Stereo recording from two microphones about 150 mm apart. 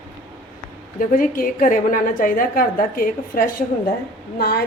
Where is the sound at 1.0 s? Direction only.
65° left (ahead or behind).